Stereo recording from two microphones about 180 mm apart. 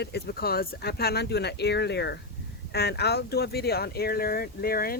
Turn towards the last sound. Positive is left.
turn(degrees=55)  # may be behind; listen again after turning